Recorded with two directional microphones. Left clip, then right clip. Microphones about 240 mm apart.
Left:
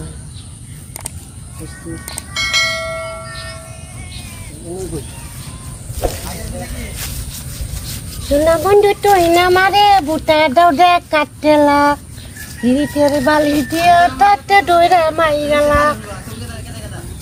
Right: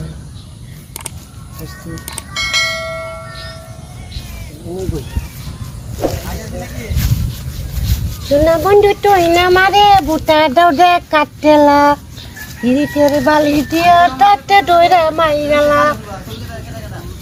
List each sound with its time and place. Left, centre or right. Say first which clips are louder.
2.0 s bell: even; centre
8.4 s speech: right 1 dB; centre